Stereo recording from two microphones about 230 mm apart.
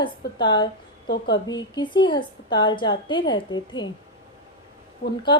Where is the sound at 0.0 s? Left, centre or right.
Centre.